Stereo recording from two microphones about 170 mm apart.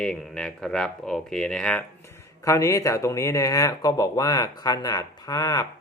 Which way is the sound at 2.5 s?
20° left (ahead or behind).